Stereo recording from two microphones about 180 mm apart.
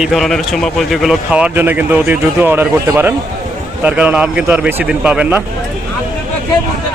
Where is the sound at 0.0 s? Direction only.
Centre (ahead or behind).